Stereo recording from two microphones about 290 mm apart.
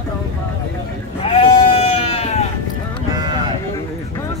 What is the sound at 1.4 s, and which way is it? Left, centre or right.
Sheep, centre.